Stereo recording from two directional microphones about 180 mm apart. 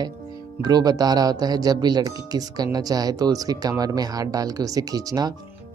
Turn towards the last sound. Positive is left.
turn(degrees=-20)  # may be behind; listen again after turning